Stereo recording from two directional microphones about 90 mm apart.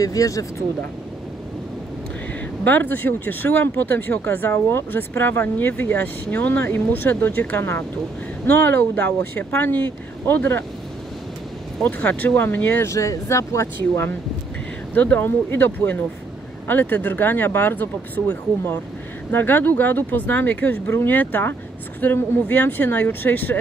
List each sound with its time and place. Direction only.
0.0 s speech: 40° left (ahead or behind)
2.6 s speech: 20° left (ahead or behind)
11.8 s speech: 15° left (ahead or behind)